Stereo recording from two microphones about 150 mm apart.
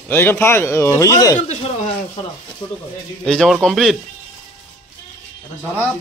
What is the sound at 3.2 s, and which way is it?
Speech, 5° left (ahead or behind).